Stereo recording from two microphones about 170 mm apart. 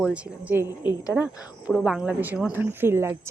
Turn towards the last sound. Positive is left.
turn(degrees=-15)  # may be behind; listen again after turning